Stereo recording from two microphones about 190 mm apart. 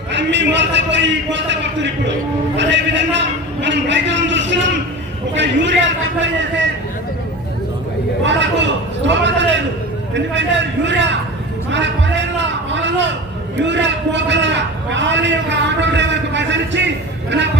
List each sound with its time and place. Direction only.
0.1 s a man's voice: 70° right (ahead or behind)
8.2 s a man's voice: 70° right (ahead or behind)
12.7 s a sound: 70° right (ahead or behind)
13.6 s a man's voice: 70° right (ahead or behind)